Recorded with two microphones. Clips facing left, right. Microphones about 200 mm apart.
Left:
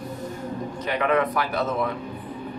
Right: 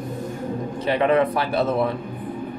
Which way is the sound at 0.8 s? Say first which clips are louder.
Right 4 dB; 30° right (ahead or behind).